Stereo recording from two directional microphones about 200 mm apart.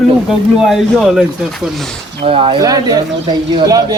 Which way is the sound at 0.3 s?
Centre (ahead or behind).